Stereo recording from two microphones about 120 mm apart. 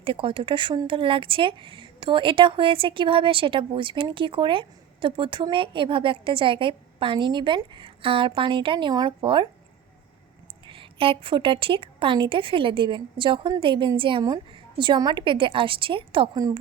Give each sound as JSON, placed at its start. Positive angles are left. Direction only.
{"t": 0.0, "sound": "speech", "side_deg": -50}
{"t": 10.7, "sound": "speech", "side_deg": -45}